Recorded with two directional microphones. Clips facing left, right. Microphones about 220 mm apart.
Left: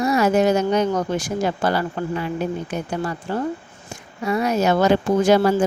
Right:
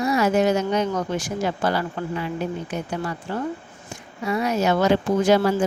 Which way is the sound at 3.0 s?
40° left (ahead or behind).